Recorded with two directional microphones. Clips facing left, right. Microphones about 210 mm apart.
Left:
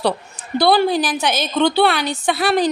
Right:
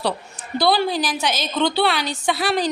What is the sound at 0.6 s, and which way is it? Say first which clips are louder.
A woman's voice: left 4 dB; 55° left (ahead or behind).